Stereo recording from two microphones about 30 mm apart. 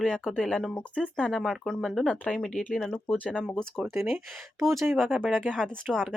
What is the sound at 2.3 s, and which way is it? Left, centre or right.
Speech, left.